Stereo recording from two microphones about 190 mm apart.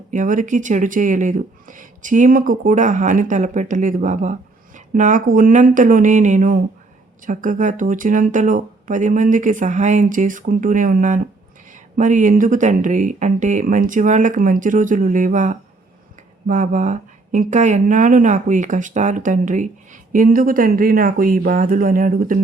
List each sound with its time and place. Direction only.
0.1 s speech: 45° right (ahead or behind)